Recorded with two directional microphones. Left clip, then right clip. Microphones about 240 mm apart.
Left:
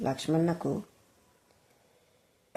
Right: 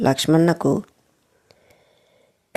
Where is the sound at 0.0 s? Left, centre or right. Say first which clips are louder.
Right 12 dB; right.